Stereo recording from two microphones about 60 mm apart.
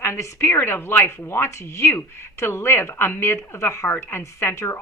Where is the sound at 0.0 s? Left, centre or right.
Left.